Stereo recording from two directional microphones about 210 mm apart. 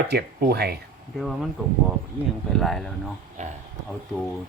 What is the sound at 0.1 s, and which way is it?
Speech, 50° right (ahead or behind).